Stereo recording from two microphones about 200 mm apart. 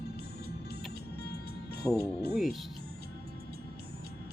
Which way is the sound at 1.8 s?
10° left (ahead or behind).